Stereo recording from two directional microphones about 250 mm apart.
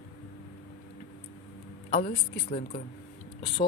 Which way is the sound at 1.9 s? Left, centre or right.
Left.